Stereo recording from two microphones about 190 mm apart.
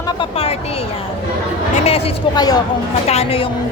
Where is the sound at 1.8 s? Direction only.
30° left (ahead or behind).